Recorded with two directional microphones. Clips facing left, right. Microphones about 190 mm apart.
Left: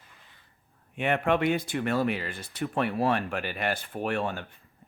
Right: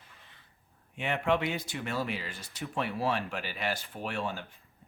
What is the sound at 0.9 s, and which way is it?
Speech, 55° left (ahead or behind).